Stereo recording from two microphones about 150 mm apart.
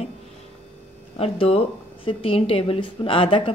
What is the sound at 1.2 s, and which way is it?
A woman's voice, 40° left (ahead or behind).